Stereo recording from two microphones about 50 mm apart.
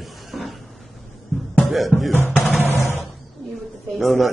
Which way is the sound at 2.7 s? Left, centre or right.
Left.